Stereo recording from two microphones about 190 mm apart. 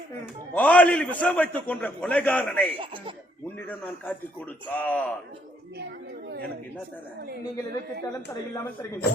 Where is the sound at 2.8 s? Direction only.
25° right (ahead or behind).